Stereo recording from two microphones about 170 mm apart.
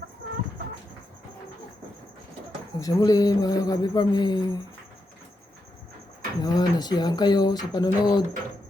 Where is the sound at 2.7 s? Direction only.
20° left (ahead or behind).